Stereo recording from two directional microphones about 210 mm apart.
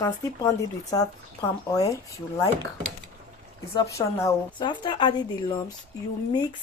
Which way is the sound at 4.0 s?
15° left (ahead or behind).